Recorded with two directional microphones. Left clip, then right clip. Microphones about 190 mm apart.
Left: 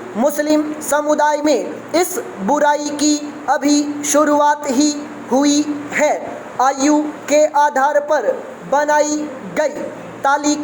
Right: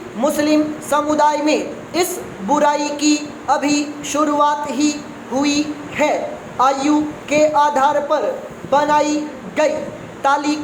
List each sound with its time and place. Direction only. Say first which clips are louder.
0.2 s a woman's voice: even; 25° left (ahead or behind)
10.2 s a woman's voice: left 1 dB; 30° left (ahead or behind)